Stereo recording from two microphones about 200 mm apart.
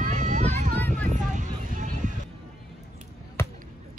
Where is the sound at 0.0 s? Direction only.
40° right (ahead or behind).